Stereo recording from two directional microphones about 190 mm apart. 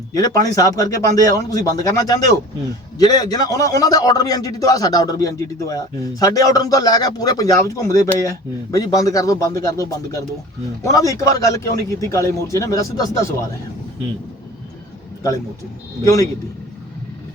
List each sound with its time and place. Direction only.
0.1 s a man's voice: 20° left (ahead or behind)
10.8 s a man's voice: 15° left (ahead or behind)
16.0 s a man's voice: 15° left (ahead or behind)